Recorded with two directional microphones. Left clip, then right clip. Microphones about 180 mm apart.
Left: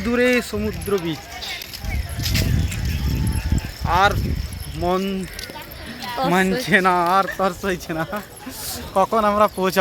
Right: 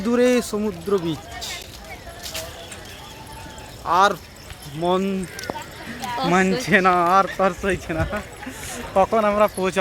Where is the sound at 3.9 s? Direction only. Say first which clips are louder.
Even; 10° right (ahead or behind).